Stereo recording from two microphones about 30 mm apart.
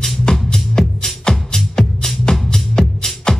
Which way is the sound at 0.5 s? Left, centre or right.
Left.